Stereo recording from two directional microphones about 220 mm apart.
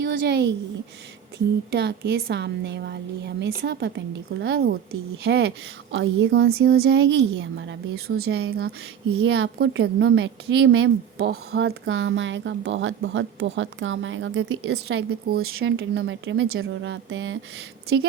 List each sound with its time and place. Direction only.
0.0 s a woman's voice: 50° right (ahead or behind)
1.7 s a woman's voice: 50° right (ahead or behind)
5.9 s a woman's voice: 55° right (ahead or behind)
8.1 s a woman's voice: 45° right (ahead or behind)
15.6 s a woman's voice: 55° right (ahead or behind)